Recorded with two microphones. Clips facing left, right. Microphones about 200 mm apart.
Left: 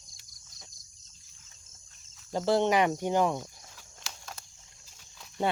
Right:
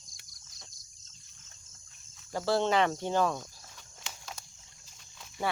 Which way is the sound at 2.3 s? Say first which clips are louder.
Left 3 dB; 20° left (ahead or behind).